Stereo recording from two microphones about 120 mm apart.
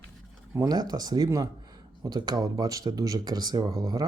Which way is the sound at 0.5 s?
30° right (ahead or behind).